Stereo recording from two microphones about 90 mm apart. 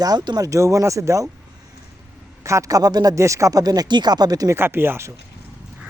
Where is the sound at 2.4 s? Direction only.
35° right (ahead or behind).